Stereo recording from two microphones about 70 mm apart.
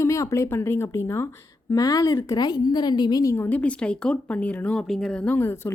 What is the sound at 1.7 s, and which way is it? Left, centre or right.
Speech, left.